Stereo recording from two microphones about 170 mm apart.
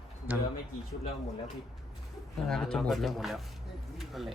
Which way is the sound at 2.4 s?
5° left (ahead or behind).